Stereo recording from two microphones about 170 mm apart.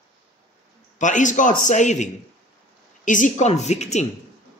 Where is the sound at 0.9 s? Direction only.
45° left (ahead or behind).